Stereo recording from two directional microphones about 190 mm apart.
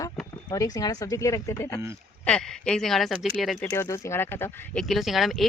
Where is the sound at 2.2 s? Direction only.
5° left (ahead or behind).